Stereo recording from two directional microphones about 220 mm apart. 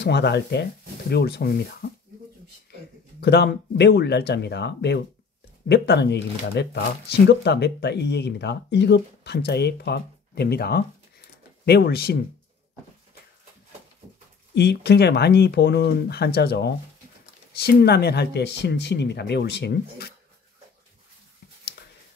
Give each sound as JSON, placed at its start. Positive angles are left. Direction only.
{"t": 0.0, "sound": "speech", "side_deg": 50}
{"t": 3.2, "sound": "speech", "side_deg": 50}
{"t": 14.5, "sound": "speech", "side_deg": 50}